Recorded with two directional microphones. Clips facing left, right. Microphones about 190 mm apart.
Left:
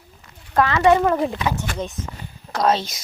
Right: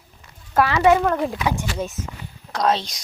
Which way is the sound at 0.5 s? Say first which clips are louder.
Even; 5° right (ahead or behind).